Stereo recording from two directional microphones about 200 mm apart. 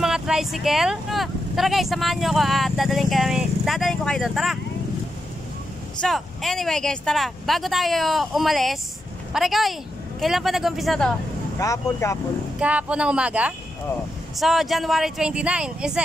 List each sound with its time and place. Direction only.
0.0 s speech: centre (ahead or behind)
5.9 s speech: centre (ahead or behind)
11.6 s speech: 15° left (ahead or behind)
12.5 s speech: 5° right (ahead or behind)